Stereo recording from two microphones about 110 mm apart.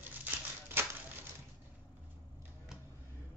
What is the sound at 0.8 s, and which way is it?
Typewriter, 20° right (ahead or behind).